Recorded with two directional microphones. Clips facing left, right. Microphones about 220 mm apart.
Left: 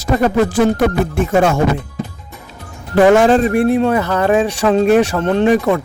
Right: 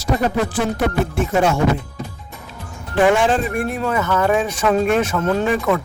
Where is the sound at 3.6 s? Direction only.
30° left (ahead or behind).